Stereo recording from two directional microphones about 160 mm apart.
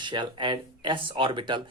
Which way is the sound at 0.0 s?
30° right (ahead or behind).